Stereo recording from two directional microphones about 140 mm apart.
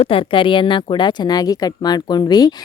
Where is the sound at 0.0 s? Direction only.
40° left (ahead or behind).